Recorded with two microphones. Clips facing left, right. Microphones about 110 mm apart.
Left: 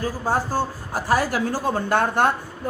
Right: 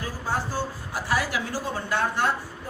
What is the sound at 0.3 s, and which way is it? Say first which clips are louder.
A woman's voice: left 5 dB; 45° left (ahead or behind).